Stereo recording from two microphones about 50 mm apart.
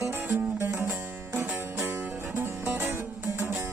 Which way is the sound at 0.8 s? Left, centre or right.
Right.